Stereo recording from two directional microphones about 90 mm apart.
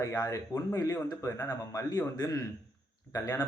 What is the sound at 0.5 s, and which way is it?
A man's voice, 35° left (ahead or behind).